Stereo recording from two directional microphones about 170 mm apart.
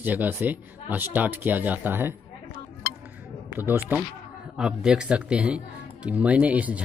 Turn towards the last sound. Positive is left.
turn(degrees=-10)  # may be behind; listen again after turning